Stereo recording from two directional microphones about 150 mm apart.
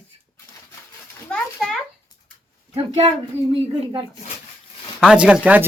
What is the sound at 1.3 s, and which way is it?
Speech, 5° left (ahead or behind).